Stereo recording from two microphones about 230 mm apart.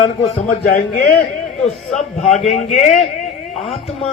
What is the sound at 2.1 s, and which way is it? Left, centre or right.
A man's voice, left.